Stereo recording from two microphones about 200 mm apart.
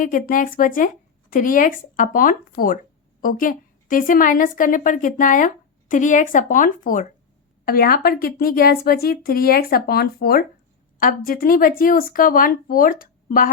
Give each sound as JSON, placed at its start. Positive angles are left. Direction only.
{"t": 0.0, "sound": "speech", "side_deg": 40}